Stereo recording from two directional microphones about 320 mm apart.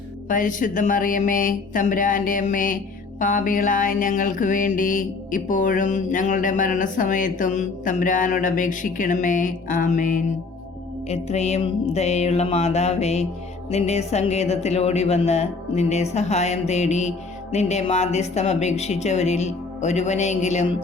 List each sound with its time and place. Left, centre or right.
0.3 s speech: left